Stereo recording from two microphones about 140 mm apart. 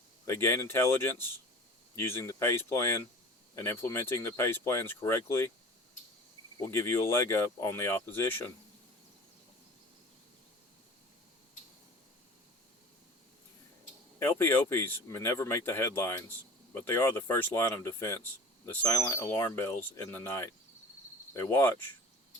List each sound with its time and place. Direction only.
0.3 s speech: 15° left (ahead or behind)
6.7 s speech: 20° left (ahead or behind)
14.2 s speech: 15° left (ahead or behind)